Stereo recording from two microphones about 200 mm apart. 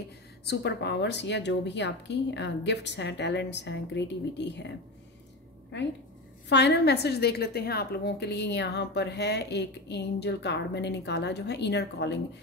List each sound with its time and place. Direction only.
0.5 s a woman's voice: 55° left (ahead or behind)
6.5 s a woman's voice: 55° left (ahead or behind)